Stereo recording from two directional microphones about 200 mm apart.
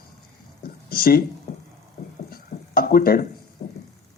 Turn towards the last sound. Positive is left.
turn(degrees=35)  # may be behind; listen again after turning